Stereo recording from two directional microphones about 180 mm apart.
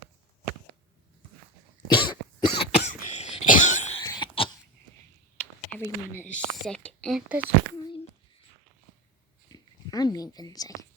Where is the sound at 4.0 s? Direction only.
20° left (ahead or behind).